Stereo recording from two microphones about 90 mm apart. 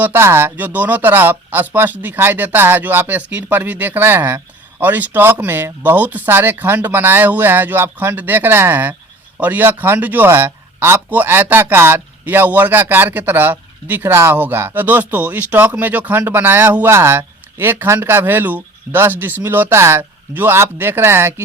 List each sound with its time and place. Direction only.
0.0 s a man's voice: 25° right (ahead or behind)